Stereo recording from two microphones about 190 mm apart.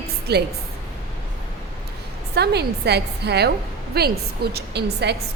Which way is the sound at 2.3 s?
60° right (ahead or behind).